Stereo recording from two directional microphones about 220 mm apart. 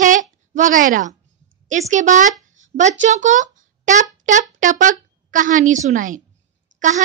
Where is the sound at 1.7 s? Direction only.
35° right (ahead or behind).